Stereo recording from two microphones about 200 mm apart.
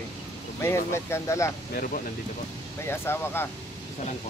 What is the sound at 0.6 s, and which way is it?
Speech, 15° left (ahead or behind).